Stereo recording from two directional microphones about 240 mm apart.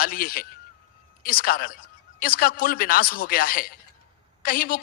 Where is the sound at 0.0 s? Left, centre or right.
Left.